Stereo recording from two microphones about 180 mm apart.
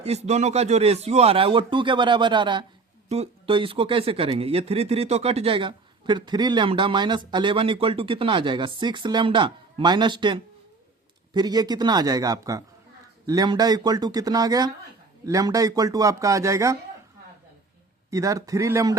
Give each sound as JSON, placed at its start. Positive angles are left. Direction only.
{"t": 0.0, "sound": "speech", "side_deg": -35}
{"t": 18.1, "sound": "speech", "side_deg": -20}